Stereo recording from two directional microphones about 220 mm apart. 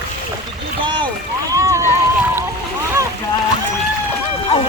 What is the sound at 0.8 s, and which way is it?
Boat, 20° right (ahead or behind).